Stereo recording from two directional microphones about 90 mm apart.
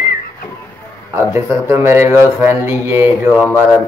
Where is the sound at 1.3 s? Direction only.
30° right (ahead or behind).